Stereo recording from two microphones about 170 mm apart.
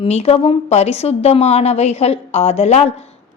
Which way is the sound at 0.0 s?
35° left (ahead or behind).